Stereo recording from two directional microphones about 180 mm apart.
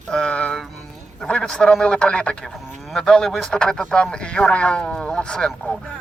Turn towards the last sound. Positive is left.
turn(degrees=5)  # may be behind; listen again after turning